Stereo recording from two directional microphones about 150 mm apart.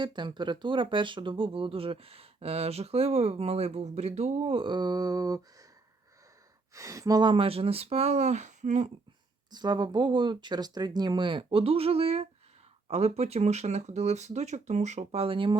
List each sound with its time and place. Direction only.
0.0 s speech: 30° right (ahead or behind)
6.7 s speech: 20° right (ahead or behind); by 8.9 s 50° right (ahead or behind)
9.5 s speech: 30° right (ahead or behind)